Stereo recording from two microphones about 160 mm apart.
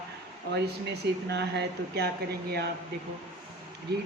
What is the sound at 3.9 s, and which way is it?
Speech, 90° right.